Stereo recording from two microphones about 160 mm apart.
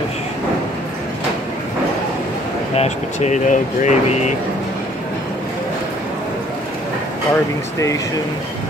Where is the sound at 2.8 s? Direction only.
45° left (ahead or behind).